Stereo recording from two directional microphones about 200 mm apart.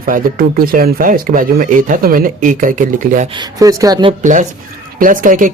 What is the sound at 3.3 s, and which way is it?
Speech, 15° right (ahead or behind).